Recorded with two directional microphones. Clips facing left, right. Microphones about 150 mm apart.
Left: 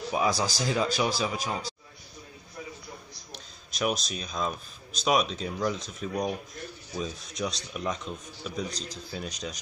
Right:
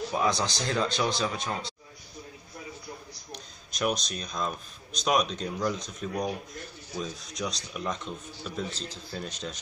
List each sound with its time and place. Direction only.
0.1 s speech: 5° left (ahead or behind)
3.3 s speech: centre (ahead or behind)
8.6 s speech: 40° left (ahead or behind)
9.1 s speech: 10° left (ahead or behind)